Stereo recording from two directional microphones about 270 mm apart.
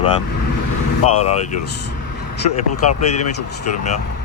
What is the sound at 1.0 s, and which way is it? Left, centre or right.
Speech, left.